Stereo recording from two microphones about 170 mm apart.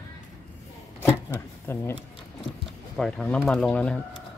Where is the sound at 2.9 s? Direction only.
5° left (ahead or behind).